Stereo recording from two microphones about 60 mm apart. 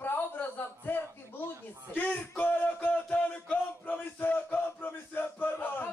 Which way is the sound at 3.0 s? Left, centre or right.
Centre.